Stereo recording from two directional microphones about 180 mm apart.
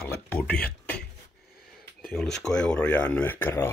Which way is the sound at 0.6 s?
65° left (ahead or behind).